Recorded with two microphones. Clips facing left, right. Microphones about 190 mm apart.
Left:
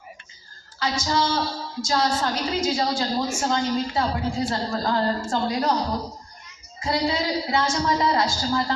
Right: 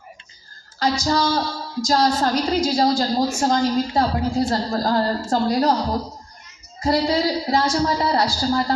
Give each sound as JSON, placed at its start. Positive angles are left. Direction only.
{"t": 0.8, "sound": "a woman's voice", "side_deg": -40}
{"t": 6.7, "sound": "a woman's voice", "side_deg": -40}